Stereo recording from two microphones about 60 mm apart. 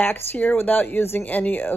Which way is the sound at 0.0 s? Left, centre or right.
Left.